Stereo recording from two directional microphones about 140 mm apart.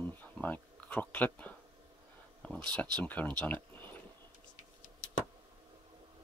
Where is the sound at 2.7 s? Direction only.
10° left (ahead or behind).